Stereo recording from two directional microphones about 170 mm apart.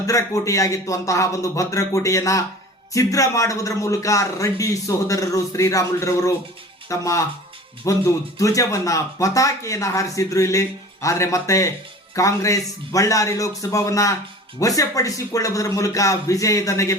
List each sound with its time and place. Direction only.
0.0 s speech: 20° left (ahead or behind)